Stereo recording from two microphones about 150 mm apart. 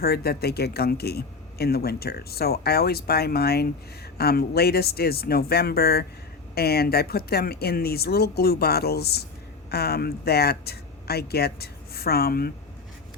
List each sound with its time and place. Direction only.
0.0 s speech: 90° left